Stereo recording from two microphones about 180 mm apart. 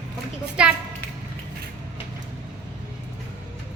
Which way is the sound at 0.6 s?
5° right (ahead or behind).